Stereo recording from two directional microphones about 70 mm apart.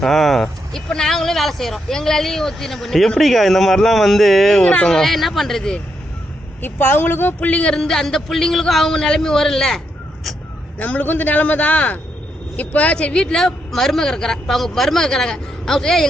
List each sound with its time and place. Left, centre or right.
0.0 s speech: centre
4.6 s speech: centre
6.6 s a man's voice: left; by 9.8 s centre
10.8 s a man's voice: left